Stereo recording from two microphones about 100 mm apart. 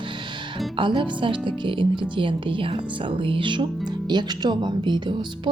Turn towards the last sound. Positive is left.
turn(degrees=-50)  # may be behind; listen again after turning